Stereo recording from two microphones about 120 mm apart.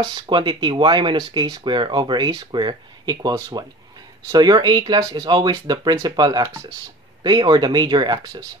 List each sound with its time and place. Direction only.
0.0 s speech: 45° right (ahead or behind)